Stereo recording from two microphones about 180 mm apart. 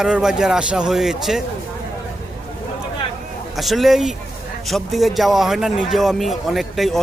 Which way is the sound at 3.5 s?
Centre (ahead or behind).